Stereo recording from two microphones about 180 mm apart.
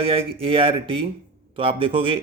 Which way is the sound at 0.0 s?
30° right (ahead or behind).